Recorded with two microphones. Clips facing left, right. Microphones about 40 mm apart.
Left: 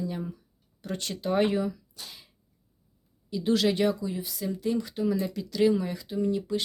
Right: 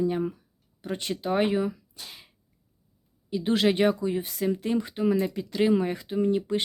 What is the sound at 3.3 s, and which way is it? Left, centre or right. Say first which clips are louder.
Speech: right 1 dB; right.